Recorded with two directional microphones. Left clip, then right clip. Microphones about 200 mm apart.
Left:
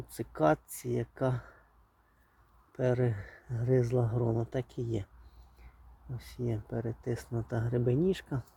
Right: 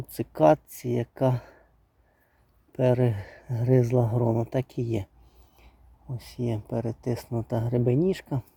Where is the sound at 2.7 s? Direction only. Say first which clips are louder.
Right 7 dB; 35° right (ahead or behind).